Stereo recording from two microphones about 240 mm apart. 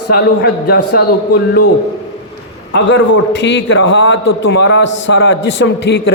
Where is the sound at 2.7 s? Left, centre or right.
Left.